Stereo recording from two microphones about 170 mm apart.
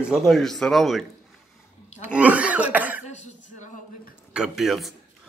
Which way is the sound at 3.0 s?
40° left (ahead or behind).